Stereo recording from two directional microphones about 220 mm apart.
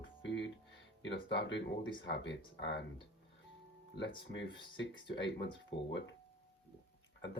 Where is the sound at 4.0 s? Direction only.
55° left (ahead or behind).